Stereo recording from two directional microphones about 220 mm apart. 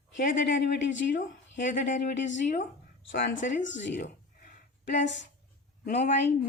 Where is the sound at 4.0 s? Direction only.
35° left (ahead or behind).